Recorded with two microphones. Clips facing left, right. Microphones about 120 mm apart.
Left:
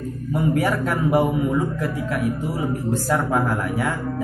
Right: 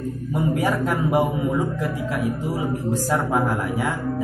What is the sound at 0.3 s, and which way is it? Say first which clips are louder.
A man's voice: left 1 dB; 15° right (ahead or behind).